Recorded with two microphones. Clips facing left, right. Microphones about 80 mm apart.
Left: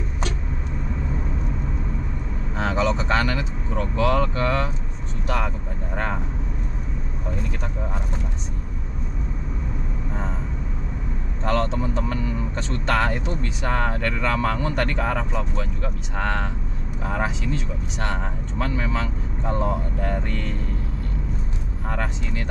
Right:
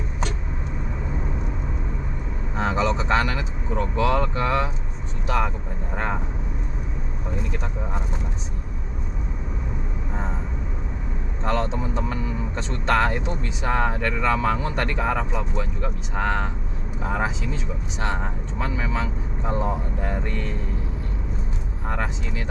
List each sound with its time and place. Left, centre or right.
2.5 s speech: centre
11.4 s speech: centre
21.8 s speech: centre